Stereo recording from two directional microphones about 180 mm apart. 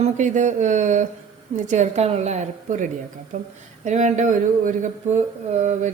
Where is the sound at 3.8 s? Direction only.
40° right (ahead or behind).